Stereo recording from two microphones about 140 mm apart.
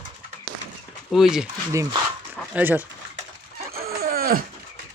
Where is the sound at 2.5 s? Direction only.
10° right (ahead or behind).